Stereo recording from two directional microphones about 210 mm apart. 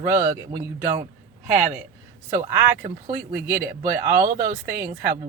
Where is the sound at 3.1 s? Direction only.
10° right (ahead or behind).